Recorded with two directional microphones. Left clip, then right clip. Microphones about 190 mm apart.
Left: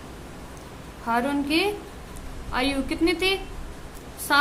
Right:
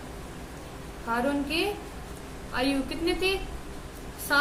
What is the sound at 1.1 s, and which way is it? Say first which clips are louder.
A woman's voice: left 4 dB; 55° left (ahead or behind).